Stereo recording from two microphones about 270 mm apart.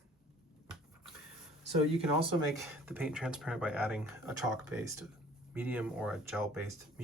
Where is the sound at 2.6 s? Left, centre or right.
Centre.